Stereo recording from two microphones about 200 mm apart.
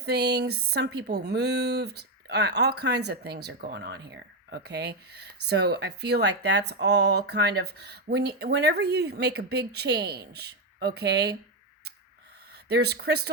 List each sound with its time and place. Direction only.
0.0 s speech: 55° right (ahead or behind)
12.6 s speech: 55° right (ahead or behind)